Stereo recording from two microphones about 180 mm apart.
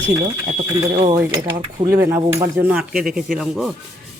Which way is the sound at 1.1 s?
20° right (ahead or behind).